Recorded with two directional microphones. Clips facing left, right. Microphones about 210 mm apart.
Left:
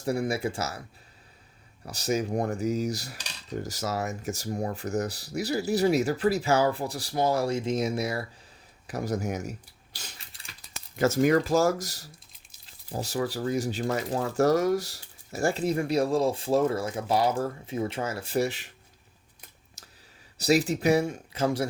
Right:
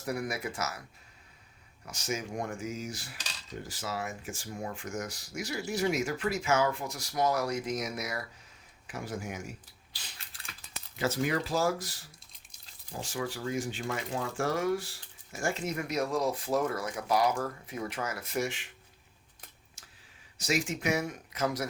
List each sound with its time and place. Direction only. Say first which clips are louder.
0.0 s speech: left 7 dB; 30° left (ahead or behind)
1.8 s speech: left 8 dB; 35° left (ahead or behind)
10.2 s typing: even; centre (ahead or behind)
10.8 s speech: left 7 dB; 45° left (ahead or behind)
19.8 s a sound: left 5 dB; 40° left (ahead or behind)
20.4 s speech: left 8 dB; 35° left (ahead or behind)